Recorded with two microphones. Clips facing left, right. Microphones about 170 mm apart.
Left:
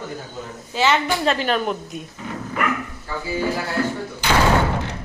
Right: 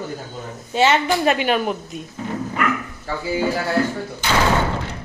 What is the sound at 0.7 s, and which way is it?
A woman's voice, 20° right (ahead or behind).